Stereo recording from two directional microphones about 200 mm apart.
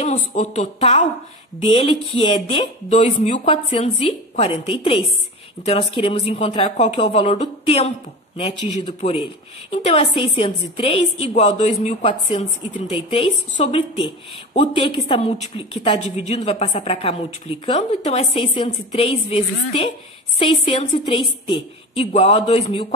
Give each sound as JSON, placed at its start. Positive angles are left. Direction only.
{"t": 0.0, "sound": "a woman's voice", "side_deg": 35}
{"t": 2.9, "sound": "a woman's voice", "side_deg": 35}